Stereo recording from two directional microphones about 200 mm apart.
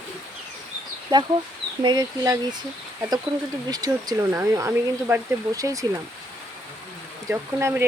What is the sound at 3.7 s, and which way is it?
Speech, 20° right (ahead or behind).